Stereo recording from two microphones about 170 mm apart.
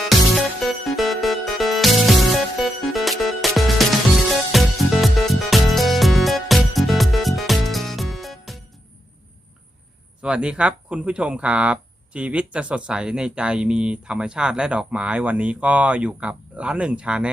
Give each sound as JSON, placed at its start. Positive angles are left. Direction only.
{"t": 0.9, "sound": "music", "side_deg": 0}
{"t": 10.2, "sound": "speech", "side_deg": -5}